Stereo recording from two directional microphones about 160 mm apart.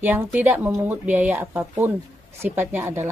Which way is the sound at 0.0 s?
10° right (ahead or behind).